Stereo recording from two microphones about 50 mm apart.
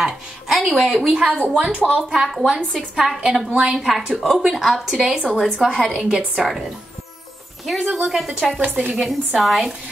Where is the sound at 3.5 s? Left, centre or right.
Right.